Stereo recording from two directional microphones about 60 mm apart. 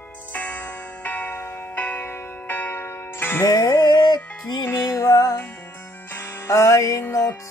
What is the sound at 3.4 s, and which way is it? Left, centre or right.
Music, left.